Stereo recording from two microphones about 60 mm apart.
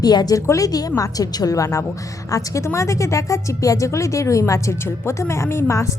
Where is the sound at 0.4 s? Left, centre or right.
Left.